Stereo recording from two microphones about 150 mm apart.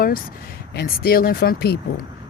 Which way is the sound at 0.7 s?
90° left.